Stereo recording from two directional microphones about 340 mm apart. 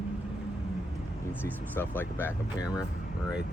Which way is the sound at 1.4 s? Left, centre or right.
Centre.